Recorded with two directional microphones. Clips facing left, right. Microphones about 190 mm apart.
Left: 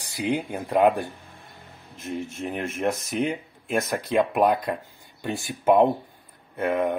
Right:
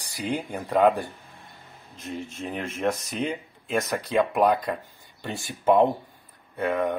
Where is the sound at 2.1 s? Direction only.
10° left (ahead or behind).